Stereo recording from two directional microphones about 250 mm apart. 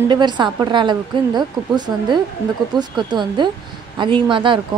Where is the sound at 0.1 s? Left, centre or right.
Centre.